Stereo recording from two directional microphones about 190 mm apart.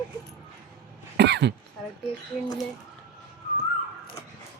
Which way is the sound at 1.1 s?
60° right (ahead or behind).